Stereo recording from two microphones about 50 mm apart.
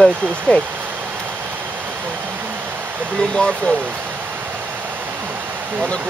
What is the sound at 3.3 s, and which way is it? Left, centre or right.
Speech, centre.